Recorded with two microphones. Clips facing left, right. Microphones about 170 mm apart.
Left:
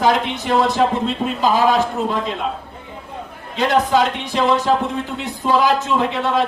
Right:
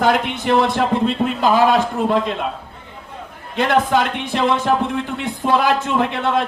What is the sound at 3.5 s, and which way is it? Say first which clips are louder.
Speech: even; 55° right (ahead or behind).